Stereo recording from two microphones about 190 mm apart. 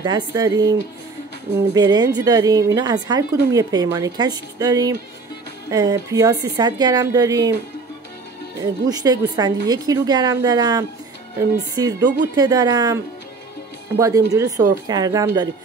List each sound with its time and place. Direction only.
0.0 s a woman's voice: 20° right (ahead or behind)
8.8 s a woman's voice: 20° right (ahead or behind)